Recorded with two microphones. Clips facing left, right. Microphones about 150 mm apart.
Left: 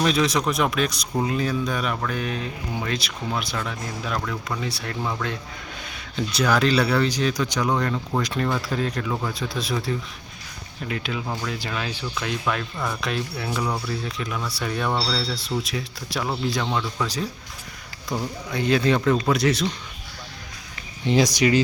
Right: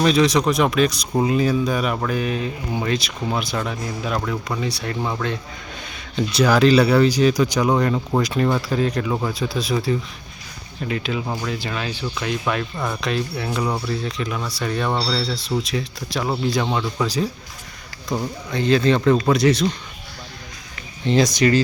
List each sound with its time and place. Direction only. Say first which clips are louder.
0.0 s speech: right 5 dB; centre (ahead or behind)
3.5 s speech: right 4 dB; 20° right (ahead or behind)
4.7 s speech: right 5 dB; 5° right (ahead or behind)
6.1 s speech: right 5 dB; centre (ahead or behind)
13.0 s speech: right 4 dB; centre (ahead or behind)
14.8 s speech: right 1 dB; 10° right (ahead or behind)
15.1 s speech: right 3 dB; 5° left (ahead or behind)
16.2 s speech: right 4 dB; 10° right (ahead or behind)
18.5 s speech: right 3 dB; 10° left (ahead or behind)
21.0 s speech: right 2 dB; 15° left (ahead or behind)